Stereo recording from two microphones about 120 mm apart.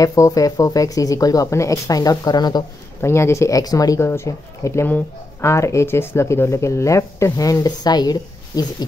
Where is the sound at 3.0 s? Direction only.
20° left (ahead or behind).